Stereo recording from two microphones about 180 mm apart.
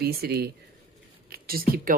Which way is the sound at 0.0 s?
60° right (ahead or behind).